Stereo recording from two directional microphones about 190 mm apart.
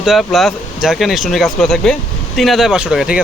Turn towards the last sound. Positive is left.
turn(degrees=-5)  # may be behind; listen again after turning